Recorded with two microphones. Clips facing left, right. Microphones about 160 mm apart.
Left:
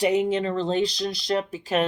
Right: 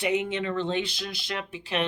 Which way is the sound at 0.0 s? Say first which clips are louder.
Left 5 dB; 40° left (ahead or behind).